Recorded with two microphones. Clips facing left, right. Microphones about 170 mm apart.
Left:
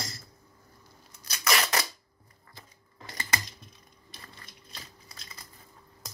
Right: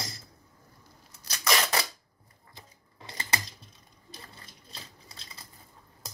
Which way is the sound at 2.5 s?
20° right (ahead or behind).